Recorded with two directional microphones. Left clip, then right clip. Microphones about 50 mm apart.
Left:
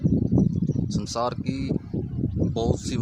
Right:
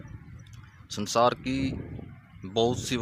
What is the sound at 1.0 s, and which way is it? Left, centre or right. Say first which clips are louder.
Speech: right 6 dB; right.